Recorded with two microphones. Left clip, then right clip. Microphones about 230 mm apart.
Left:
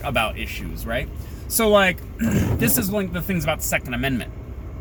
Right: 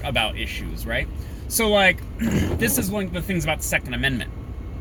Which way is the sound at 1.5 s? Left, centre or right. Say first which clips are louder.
Left 1 dB; centre.